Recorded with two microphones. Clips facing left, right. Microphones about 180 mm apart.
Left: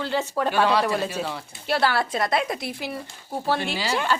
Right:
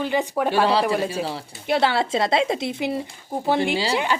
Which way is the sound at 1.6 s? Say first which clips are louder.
Right 2 dB; 20° right (ahead or behind).